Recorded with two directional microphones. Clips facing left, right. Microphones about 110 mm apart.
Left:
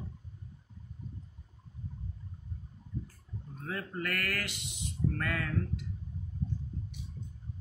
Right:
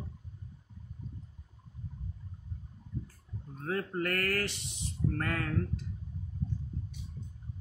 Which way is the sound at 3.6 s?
40° right (ahead or behind).